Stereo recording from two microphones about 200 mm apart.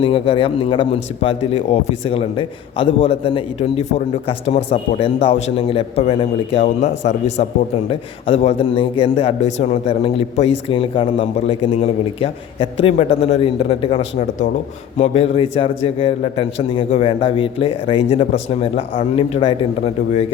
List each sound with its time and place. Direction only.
0.0 s speech: 25° left (ahead or behind)
14.2 s a man's voice: 40° left (ahead or behind)